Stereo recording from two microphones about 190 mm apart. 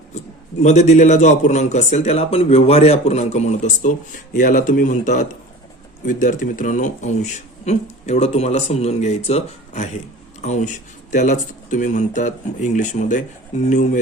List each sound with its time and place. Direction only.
0.6 s speech: 35° left (ahead or behind)